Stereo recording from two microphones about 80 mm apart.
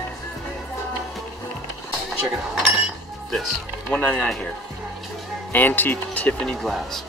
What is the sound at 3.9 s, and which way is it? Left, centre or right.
Speech, centre.